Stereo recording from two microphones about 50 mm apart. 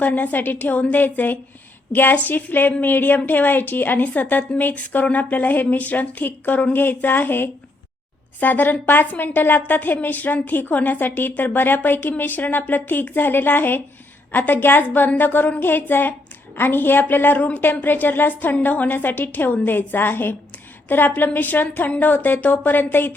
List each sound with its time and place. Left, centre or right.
0.0 s a woman's voice: left